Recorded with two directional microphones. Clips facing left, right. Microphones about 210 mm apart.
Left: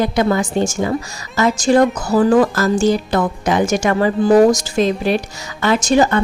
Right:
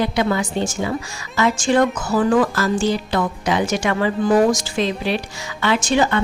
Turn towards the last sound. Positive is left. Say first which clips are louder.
# left 4 dB
turn(degrees=40)  # may be behind; listen again after turning